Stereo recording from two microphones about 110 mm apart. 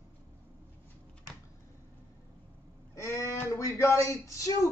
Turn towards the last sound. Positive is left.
turn(degrees=25)  # may be behind; listen again after turning